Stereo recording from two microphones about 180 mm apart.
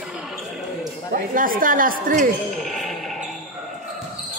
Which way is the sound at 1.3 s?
50° right (ahead or behind).